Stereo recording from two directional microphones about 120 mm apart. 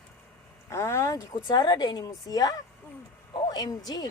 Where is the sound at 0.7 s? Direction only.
25° left (ahead or behind).